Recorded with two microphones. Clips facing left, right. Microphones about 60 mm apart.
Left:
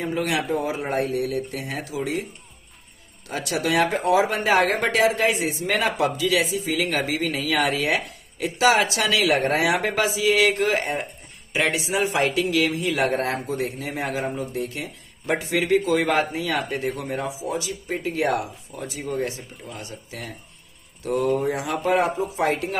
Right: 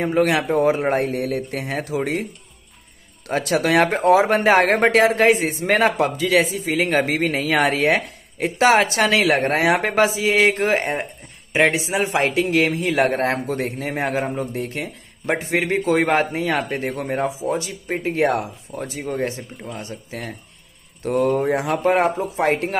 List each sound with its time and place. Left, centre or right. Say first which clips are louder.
0.0 s speech: right 6 dB; right
3.3 s speech: right 5 dB; right